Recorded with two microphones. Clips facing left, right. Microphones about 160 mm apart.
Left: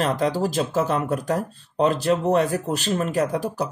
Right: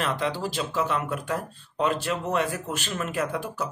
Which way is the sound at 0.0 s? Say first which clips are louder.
Left 6 dB; 40° left (ahead or behind).